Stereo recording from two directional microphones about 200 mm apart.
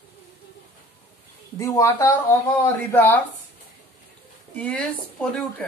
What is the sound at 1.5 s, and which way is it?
Speech, 15° left (ahead or behind).